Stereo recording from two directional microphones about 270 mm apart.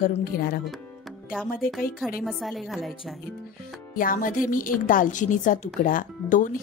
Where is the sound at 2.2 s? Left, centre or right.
Centre.